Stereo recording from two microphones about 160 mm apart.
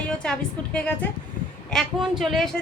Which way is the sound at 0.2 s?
5° left (ahead or behind).